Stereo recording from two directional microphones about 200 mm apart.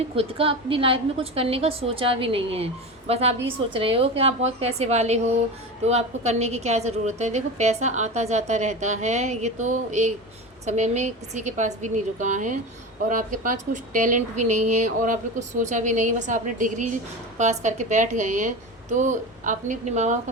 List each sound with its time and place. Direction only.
0.2 s a woman's voice: 25° right (ahead or behind)